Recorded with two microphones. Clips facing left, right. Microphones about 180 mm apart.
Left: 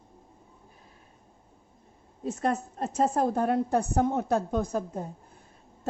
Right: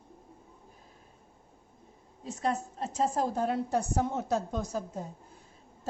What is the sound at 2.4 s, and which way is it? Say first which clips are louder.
Speech: left 2 dB; 55° left (ahead or behind).